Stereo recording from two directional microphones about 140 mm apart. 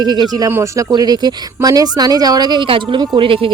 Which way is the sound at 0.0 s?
30° right (ahead or behind).